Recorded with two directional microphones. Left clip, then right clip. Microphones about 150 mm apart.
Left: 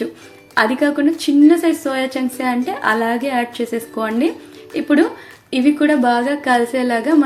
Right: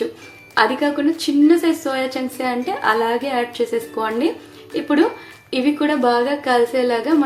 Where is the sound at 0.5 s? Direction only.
20° left (ahead or behind).